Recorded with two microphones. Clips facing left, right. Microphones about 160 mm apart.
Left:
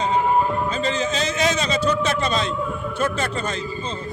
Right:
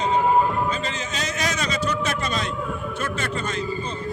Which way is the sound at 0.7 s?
30° left (ahead or behind).